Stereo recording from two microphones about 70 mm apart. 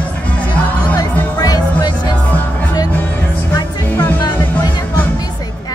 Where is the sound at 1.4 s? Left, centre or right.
Left.